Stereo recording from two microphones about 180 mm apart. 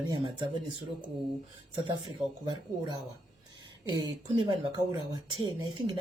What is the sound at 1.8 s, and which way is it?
Speech, 25° right (ahead or behind).